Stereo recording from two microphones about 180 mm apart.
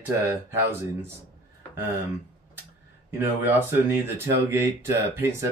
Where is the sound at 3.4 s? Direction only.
10° right (ahead or behind).